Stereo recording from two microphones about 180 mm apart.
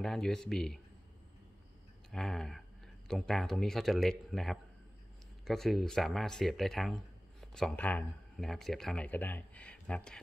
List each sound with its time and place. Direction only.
0.0 s speech: 5° left (ahead or behind)
2.0 s a sound: centre (ahead or behind)
3.1 s speech: centre (ahead or behind)